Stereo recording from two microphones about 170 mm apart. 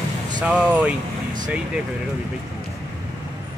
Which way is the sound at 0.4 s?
5° right (ahead or behind).